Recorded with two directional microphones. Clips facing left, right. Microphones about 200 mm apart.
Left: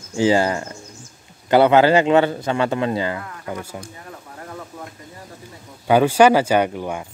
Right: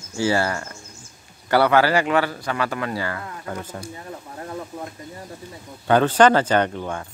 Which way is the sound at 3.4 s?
10° left (ahead or behind).